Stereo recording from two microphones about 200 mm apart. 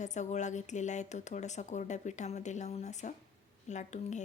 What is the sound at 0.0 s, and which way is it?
Speech, 35° left (ahead or behind).